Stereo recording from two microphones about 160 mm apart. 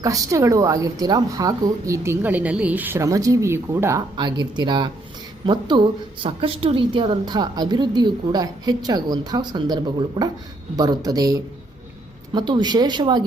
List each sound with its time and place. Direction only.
0.0 s a woman's voice: 20° right (ahead or behind)
4.2 s a woman's voice: 30° right (ahead or behind)